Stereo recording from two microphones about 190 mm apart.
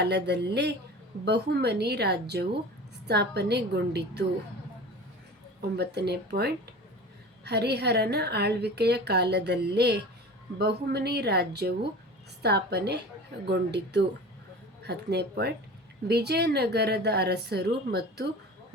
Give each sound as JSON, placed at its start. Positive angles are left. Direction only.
{"t": 0.0, "sound": "a woman's voice", "side_deg": -60}
{"t": 5.7, "sound": "a woman's voice", "side_deg": -60}